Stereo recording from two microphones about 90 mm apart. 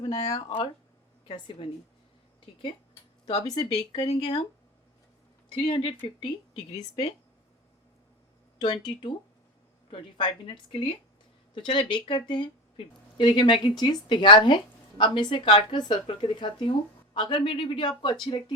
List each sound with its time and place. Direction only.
0.3 s speech: 60° left (ahead or behind)
1.3 s a woman's voice: 75° left (ahead or behind)
3.4 s speech: 45° left (ahead or behind)
5.5 s speech: 85° left
6.2 s a woman's voice: 75° left (ahead or behind)
8.6 s speech: 60° left (ahead or behind)